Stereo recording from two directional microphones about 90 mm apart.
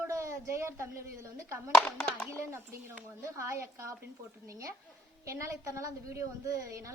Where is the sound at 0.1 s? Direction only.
35° right (ahead or behind).